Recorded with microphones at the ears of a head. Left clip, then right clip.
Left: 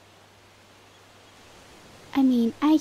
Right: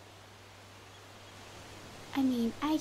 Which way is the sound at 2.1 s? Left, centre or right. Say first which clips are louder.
Left 9 dB; left.